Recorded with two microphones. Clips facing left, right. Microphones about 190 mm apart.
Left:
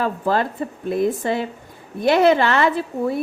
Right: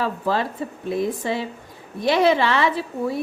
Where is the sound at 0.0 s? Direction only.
50° left (ahead or behind).